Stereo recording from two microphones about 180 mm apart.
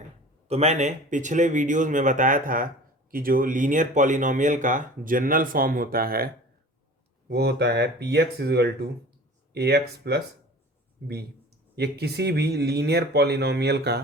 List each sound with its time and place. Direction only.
0.4 s speech: 35° right (ahead or behind); by 6.3 s 55° right (ahead or behind)
7.3 s speech: 70° right (ahead or behind)
11.8 s speech: 65° right (ahead or behind)